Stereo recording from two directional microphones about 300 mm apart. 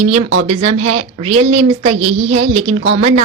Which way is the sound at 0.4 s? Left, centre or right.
Right.